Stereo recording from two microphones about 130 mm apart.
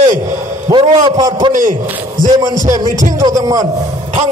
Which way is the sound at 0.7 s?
30° right (ahead or behind).